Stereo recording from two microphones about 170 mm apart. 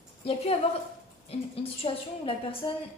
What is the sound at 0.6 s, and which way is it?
A woman's voice, 40° left (ahead or behind).